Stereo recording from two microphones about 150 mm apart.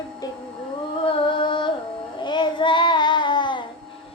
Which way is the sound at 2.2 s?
30° left (ahead or behind).